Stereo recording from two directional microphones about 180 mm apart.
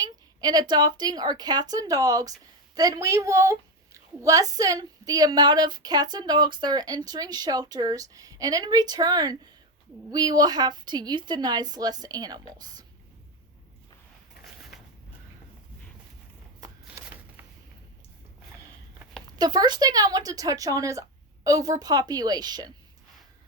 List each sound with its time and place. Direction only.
0.0 s a woman's voice: 20° right (ahead or behind)
16.6 s a sound: 15° right (ahead or behind)
19.4 s a woman's voice: 25° right (ahead or behind)